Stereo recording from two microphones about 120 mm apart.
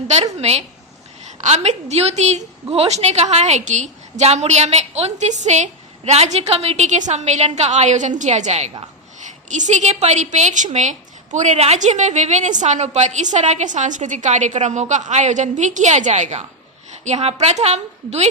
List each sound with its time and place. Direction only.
0.3 s a woman's voice: 65° right (ahead or behind); by 5.6 s 80° right
6.1 s a woman's voice: 65° right (ahead or behind)
9.5 s a woman's voice: 85° right; by 18.3 s 65° right (ahead or behind)